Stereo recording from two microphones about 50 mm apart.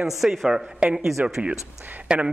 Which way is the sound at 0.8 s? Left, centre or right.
Centre.